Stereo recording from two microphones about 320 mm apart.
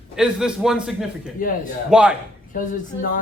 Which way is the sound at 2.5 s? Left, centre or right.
Left.